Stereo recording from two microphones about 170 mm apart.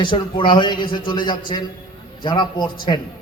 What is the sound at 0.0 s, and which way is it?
A man's voice, 30° left (ahead or behind).